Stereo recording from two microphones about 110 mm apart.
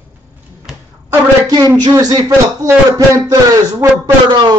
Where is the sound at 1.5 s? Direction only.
35° right (ahead or behind).